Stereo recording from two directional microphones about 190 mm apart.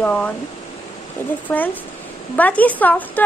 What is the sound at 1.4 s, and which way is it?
A child's voice, 10° left (ahead or behind).